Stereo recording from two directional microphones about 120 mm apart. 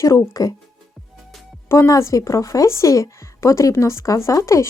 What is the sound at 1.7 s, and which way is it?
A woman's voice, 25° left (ahead or behind).